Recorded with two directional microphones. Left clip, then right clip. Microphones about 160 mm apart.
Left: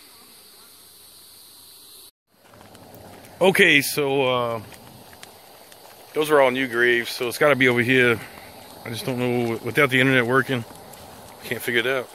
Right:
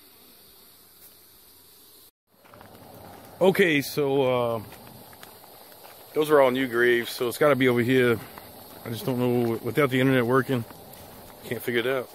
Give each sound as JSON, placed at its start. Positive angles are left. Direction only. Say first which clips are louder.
{"t": 3.3, "sound": "speech", "louder": "left 5 dB", "side_deg": -10}
{"t": 6.1, "sound": "speech", "louder": "left 2 dB", "side_deg": -10}
{"t": 9.5, "sound": "speech", "louder": "left 4 dB", "side_deg": -5}
{"t": 10.7, "sound": "bee", "louder": "left 4 dB", "side_deg": -10}